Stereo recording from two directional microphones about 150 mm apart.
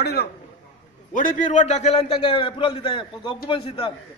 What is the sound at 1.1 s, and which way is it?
A man's voice, 60° left (ahead or behind).